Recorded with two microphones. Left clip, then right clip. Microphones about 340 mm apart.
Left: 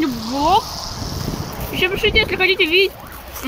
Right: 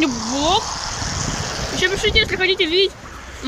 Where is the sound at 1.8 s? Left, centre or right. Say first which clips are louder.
Left 1 dB; centre.